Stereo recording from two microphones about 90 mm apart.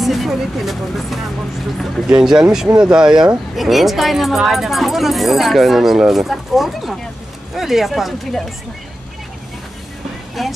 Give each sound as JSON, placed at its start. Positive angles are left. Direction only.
{"t": 0.0, "sound": "speech", "side_deg": 0}
{"t": 10.4, "sound": "speech", "side_deg": 0}